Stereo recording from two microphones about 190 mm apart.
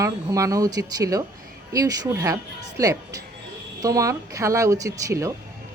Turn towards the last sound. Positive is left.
turn(degrees=-15)  # may be behind; listen again after turning